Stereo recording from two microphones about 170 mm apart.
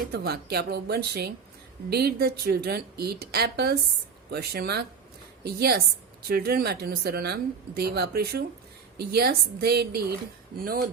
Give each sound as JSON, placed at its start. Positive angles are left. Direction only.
{"t": 0.1, "sound": "a woman's voice", "side_deg": -70}
{"t": 10.6, "sound": "speech", "side_deg": -60}